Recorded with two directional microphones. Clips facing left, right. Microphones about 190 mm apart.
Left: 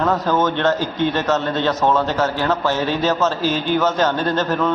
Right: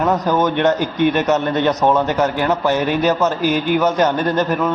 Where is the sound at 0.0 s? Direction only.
15° right (ahead or behind).